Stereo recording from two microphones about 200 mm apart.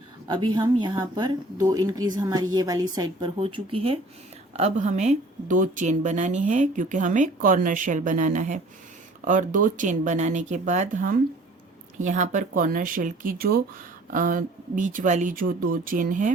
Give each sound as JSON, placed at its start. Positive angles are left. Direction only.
{"t": 0.3, "sound": "a woman's voice", "side_deg": -25}